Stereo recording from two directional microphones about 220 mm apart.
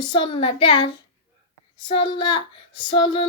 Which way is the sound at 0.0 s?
20° left (ahead or behind).